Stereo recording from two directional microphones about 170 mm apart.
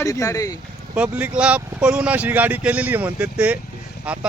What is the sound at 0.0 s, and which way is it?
Speech, 20° left (ahead or behind).